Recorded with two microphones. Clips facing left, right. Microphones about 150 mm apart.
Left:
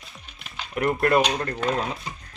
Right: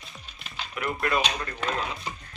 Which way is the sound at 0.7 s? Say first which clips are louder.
Left 7 dB; 50° left (ahead or behind).